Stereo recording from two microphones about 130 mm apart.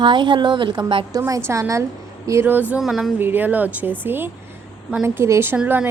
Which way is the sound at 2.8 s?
Centre (ahead or behind).